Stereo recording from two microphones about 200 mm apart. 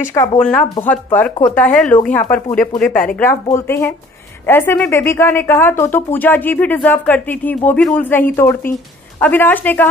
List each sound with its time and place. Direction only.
0.1 s speech: 15° left (ahead or behind)
0.4 s speech: 5° left (ahead or behind)